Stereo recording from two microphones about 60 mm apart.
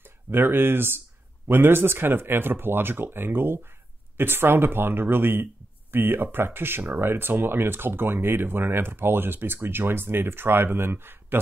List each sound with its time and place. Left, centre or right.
0.3 s speech: right